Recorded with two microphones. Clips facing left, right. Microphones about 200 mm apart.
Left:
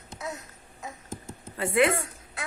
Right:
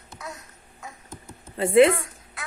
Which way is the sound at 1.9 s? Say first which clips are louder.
Right 4 dB; 25° left (ahead or behind).